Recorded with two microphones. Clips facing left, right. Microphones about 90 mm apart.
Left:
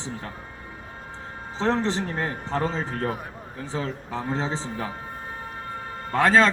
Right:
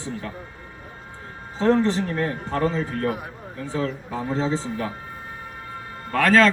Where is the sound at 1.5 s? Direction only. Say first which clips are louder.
Right 4 dB; 25° left (ahead or behind).